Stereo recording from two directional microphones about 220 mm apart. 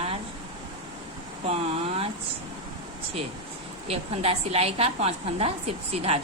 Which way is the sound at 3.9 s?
25° right (ahead or behind).